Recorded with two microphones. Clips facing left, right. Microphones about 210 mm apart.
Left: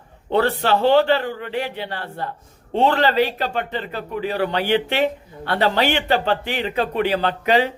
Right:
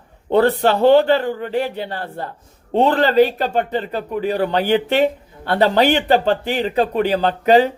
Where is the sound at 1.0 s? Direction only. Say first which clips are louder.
Right 3 dB; 40° right (ahead or behind).